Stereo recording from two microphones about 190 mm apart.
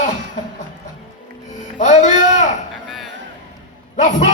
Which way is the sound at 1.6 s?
40° left (ahead or behind).